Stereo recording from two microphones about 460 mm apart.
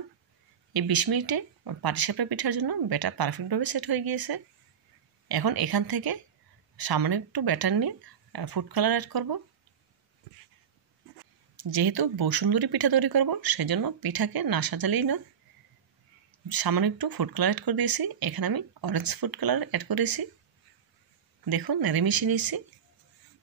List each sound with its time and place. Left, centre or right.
0.7 s speech: right
11.7 s speech: right
16.4 s speech: right
21.5 s speech: right